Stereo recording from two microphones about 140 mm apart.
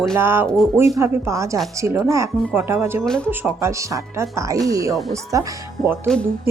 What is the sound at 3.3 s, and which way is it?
Speech, 15° right (ahead or behind).